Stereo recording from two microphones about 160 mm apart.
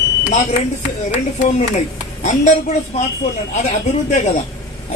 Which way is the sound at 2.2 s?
50° left (ahead or behind).